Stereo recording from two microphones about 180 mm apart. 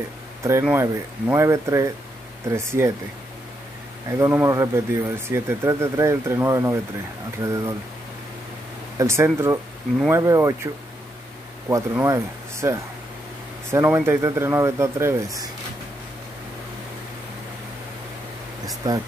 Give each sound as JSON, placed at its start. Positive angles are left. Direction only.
{"t": 0.4, "sound": "speech", "side_deg": -15}
{"t": 4.2, "sound": "speech", "side_deg": -15}
{"t": 8.9, "sound": "speech", "side_deg": -15}
{"t": 11.7, "sound": "speech", "side_deg": -15}